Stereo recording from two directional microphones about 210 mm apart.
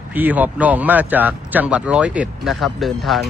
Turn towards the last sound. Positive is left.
turn(degrees=0)  # may be behind; listen again after turning